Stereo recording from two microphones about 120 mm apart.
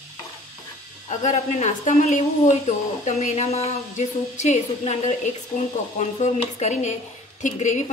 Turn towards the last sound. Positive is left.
turn(degrees=80)